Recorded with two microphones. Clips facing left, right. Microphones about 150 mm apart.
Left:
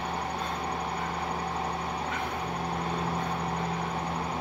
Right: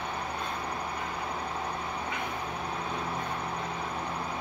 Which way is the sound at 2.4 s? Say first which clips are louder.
Left 3 dB; 70° left (ahead or behind).